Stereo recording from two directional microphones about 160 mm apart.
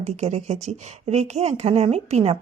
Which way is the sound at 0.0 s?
45° right (ahead or behind).